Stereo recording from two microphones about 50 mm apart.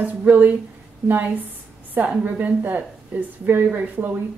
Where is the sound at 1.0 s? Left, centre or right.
Right.